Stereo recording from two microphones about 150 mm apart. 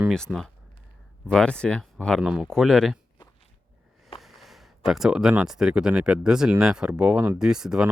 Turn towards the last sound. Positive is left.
turn(degrees=-5)  # may be behind; listen again after turning